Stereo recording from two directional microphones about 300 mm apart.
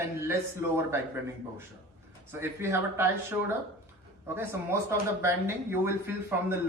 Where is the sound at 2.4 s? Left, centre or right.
Centre.